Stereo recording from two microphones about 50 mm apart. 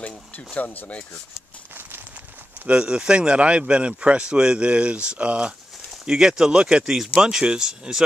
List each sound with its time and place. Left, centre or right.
0.6 s speech: left
2.7 s speech: centre
6.8 s speech: centre